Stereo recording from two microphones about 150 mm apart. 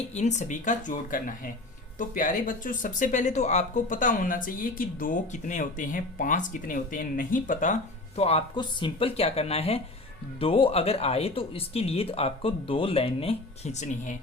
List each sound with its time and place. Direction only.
0.1 s speech: 50° left (ahead or behind)